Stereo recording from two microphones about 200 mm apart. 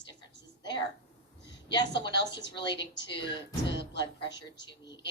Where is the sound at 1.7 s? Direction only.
60° left (ahead or behind).